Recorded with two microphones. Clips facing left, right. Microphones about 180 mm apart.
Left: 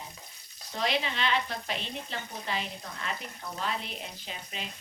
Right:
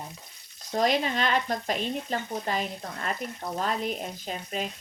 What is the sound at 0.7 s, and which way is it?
Speech, 45° right (ahead or behind).